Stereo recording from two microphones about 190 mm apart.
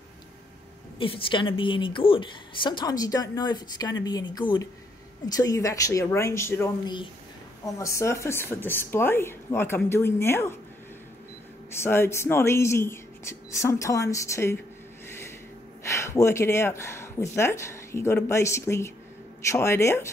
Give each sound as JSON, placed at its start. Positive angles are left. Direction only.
{"t": 0.9, "sound": "a woman's voice", "side_deg": 30}
{"t": 11.7, "sound": "speech", "side_deg": 15}
{"t": 15.0, "sound": "a sound", "side_deg": 15}
{"t": 15.8, "sound": "speech", "side_deg": 15}